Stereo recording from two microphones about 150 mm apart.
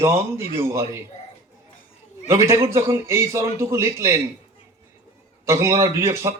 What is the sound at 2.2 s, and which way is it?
Speech, 20° right (ahead or behind).